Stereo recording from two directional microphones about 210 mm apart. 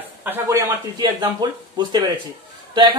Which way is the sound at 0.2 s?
10° right (ahead or behind).